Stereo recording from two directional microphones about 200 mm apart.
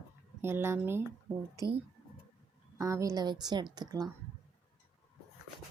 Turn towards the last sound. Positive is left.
turn(degrees=-20)  # may be behind; listen again after turning